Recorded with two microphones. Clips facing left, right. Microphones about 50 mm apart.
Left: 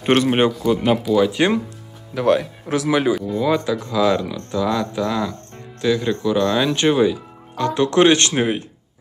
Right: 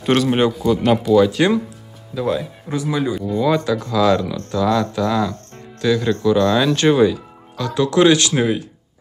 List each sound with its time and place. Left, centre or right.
0.0 s a man's voice: left
0.7 s speech: centre
1.3 s a man's voice: left
2.1 s speech: left
3.2 s speech: centre
7.5 s speech: left